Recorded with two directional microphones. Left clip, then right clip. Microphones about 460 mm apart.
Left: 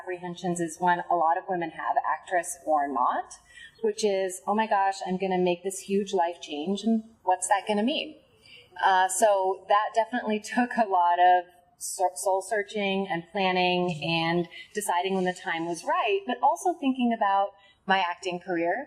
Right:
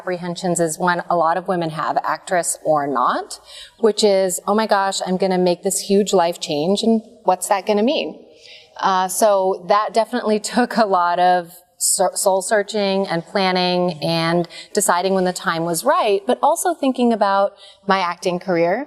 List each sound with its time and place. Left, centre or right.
0.1 s a woman's voice: right